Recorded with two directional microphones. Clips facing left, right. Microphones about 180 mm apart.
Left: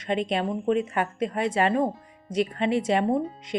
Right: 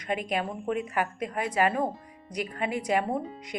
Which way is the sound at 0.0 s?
25° left (ahead or behind).